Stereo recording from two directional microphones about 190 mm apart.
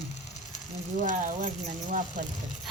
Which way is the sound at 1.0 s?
40° right (ahead or behind).